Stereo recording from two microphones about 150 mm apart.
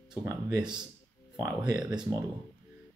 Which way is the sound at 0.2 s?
20° right (ahead or behind).